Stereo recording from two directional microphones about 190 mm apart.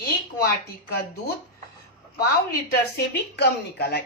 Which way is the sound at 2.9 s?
60° left (ahead or behind).